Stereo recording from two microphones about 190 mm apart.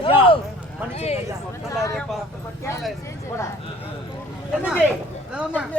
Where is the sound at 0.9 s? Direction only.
35° left (ahead or behind).